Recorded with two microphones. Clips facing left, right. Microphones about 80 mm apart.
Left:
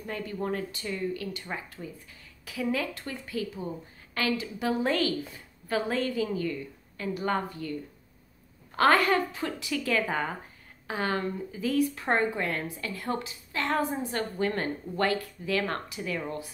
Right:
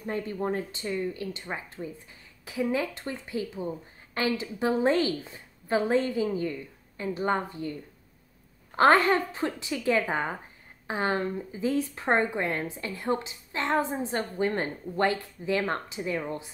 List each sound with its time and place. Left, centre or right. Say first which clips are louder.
0.0 s speech: right 3 dB; right
8.7 s speech: right 2 dB; right